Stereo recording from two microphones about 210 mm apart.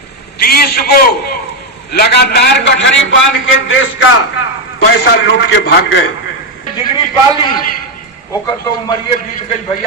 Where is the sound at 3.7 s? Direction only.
65° left (ahead or behind).